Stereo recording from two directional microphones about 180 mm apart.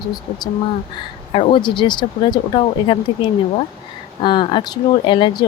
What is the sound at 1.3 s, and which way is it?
Speech, 30° left (ahead or behind).